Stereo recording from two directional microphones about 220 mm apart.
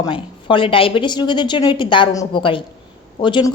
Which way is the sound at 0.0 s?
25° left (ahead or behind).